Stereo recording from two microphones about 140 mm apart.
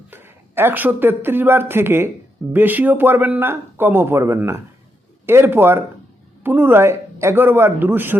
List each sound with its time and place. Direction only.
0.1 s speech: 15° right (ahead or behind)